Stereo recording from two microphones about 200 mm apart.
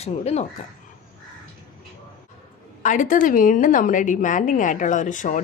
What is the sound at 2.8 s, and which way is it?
Speech, 40° left (ahead or behind).